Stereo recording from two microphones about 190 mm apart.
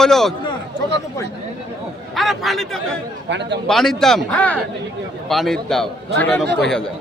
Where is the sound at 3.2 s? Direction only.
65° right (ahead or behind).